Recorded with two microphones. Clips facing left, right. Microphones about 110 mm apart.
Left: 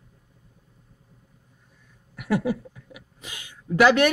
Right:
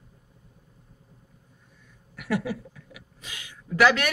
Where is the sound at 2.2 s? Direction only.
25° left (ahead or behind).